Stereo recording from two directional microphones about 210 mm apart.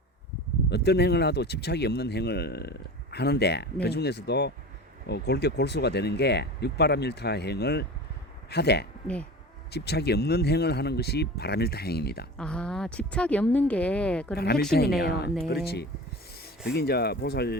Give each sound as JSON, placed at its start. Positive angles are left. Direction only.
{"t": 0.7, "sound": "speech", "side_deg": 50}
{"t": 12.4, "sound": "a woman's voice", "side_deg": 5}
{"t": 14.3, "sound": "speech", "side_deg": 50}